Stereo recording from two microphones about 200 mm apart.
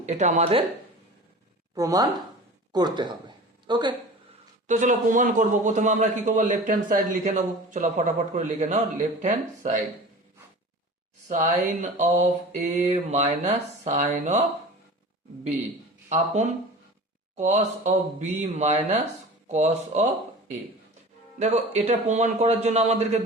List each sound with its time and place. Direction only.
0.0 s a man's voice: 35° right (ahead or behind)
1.7 s speech: 15° right (ahead or behind)
4.6 s a man's voice: 40° right (ahead or behind)
11.3 s a man's voice: 35° right (ahead or behind)
16.0 s a man's voice: 35° right (ahead or behind)
21.3 s a man's voice: 35° right (ahead or behind)